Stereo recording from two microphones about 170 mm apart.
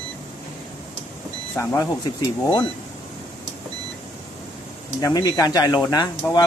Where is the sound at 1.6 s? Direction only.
20° left (ahead or behind).